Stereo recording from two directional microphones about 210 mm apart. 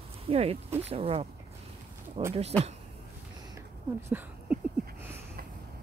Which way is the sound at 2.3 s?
30° right (ahead or behind).